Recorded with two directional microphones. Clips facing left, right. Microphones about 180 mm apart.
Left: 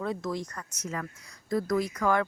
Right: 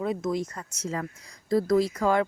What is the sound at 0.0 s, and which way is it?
Speech, 20° right (ahead or behind).